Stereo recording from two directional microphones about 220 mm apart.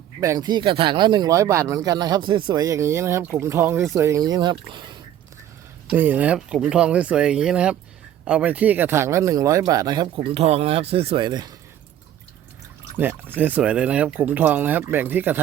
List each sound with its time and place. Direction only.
0.2 s speech: 15° right (ahead or behind)
5.9 s speech: 10° right (ahead or behind)
13.0 s speech: 10° right (ahead or behind)